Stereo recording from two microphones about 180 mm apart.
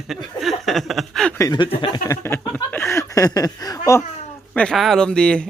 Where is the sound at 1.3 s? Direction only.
20° left (ahead or behind).